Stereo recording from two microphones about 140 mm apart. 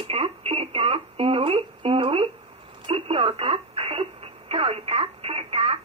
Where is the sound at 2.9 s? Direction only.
40° right (ahead or behind).